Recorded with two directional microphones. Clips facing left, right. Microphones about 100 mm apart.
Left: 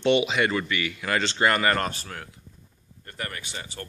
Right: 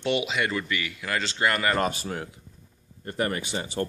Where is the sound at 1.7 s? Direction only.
15° right (ahead or behind).